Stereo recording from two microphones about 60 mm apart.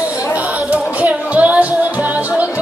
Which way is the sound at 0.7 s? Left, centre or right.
Right.